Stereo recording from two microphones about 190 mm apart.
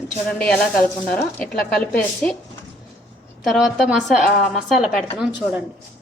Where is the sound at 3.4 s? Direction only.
Centre (ahead or behind).